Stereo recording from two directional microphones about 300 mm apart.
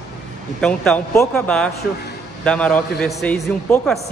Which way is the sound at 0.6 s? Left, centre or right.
Centre.